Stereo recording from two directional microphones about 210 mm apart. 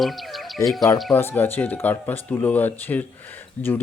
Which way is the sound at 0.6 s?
15° left (ahead or behind).